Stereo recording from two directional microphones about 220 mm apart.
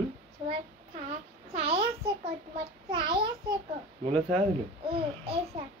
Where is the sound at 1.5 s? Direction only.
25° right (ahead or behind).